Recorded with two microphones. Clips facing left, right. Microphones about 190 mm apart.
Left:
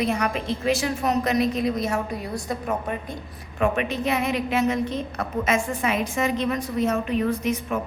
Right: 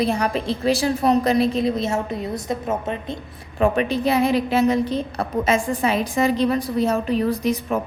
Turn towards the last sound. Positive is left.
turn(degrees=-35)  # may be behind; listen again after turning